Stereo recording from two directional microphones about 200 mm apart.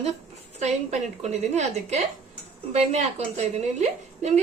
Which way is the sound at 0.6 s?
35° right (ahead or behind).